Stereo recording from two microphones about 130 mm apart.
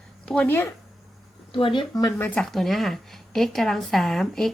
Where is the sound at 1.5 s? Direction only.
40° left (ahead or behind).